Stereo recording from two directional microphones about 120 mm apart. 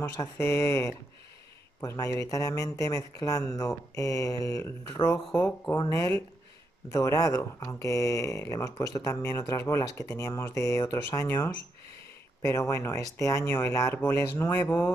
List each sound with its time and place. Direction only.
0.0 s speech: 20° left (ahead or behind)
5.8 s speech: 25° left (ahead or behind)